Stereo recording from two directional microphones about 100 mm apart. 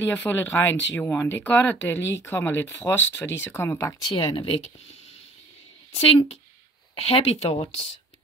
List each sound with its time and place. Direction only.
0.0 s speech: 20° left (ahead or behind)
4.1 s speech: 65° left (ahead or behind)
5.9 s speech: 90° left